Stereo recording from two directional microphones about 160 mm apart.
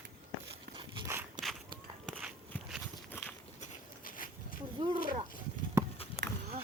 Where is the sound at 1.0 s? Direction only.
15° right (ahead or behind).